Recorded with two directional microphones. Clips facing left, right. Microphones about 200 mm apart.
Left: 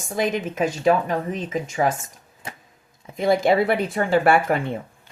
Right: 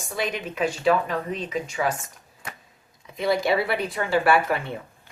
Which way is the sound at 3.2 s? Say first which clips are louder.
Left 4 dB; 50° left (ahead or behind).